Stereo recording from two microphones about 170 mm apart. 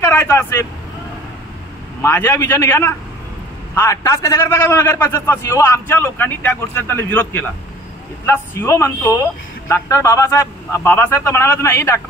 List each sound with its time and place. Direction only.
0.0 s vehicle: 15° left (ahead or behind)
2.0 s a man's voice: 15° left (ahead or behind)